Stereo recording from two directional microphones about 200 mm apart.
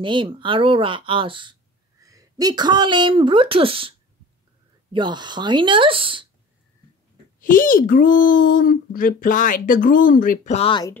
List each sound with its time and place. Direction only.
0.0 s speech: 25° right (ahead or behind)
4.9 s speech: 20° right (ahead or behind)
7.3 s a child's voice: 45° left (ahead or behind); by 11.0 s 20° left (ahead or behind)